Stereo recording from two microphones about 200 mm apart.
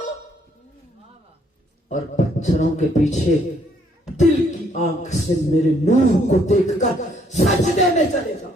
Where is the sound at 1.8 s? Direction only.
35° left (ahead or behind).